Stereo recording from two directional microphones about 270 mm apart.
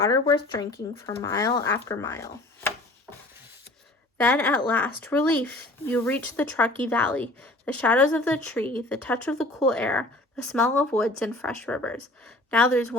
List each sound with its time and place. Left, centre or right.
0.0 s speech: centre
4.2 s speech: centre